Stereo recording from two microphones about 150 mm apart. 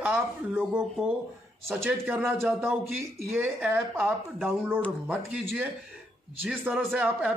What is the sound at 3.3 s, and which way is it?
Speech, 15° right (ahead or behind).